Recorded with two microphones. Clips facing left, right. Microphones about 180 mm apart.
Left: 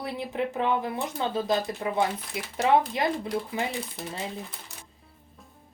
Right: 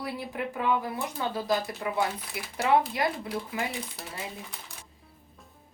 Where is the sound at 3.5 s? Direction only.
25° left (ahead or behind).